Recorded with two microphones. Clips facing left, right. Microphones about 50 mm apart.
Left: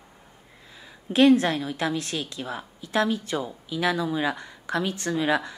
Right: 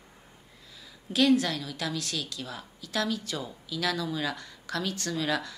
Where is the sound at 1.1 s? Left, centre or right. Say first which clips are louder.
Left 6 dB; left.